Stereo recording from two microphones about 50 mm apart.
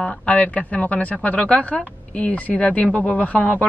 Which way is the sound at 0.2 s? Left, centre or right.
Left.